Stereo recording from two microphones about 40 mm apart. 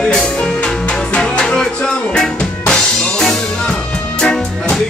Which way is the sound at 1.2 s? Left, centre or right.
Left.